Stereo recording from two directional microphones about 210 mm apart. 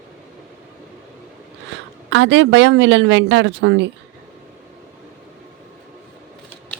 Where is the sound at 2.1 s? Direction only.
60° right (ahead or behind).